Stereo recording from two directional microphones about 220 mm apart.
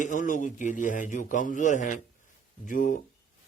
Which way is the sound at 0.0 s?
35° left (ahead or behind).